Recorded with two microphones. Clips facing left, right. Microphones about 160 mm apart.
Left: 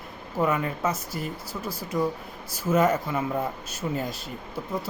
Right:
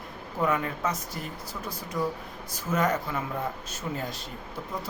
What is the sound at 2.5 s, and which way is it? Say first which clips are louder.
Speech: left 5 dB; 5° left (ahead or behind).